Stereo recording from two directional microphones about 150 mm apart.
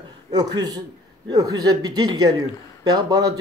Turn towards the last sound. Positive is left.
turn(degrees=-25)  # may be behind; listen again after turning